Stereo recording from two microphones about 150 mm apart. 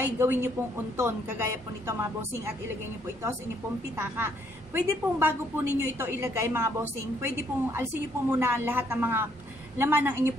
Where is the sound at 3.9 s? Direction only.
15° right (ahead or behind).